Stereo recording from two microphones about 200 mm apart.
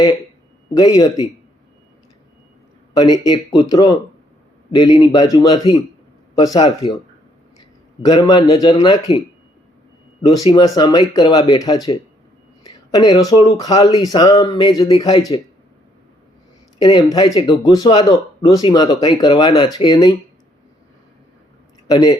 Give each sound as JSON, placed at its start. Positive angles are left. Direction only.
{"t": 0.7, "sound": "speech", "side_deg": 20}
{"t": 2.9, "sound": "a man's voice", "side_deg": 20}
{"t": 12.9, "sound": "speech", "side_deg": 20}
{"t": 16.7, "sound": "speech", "side_deg": 20}
{"t": 21.8, "sound": "speech", "side_deg": 20}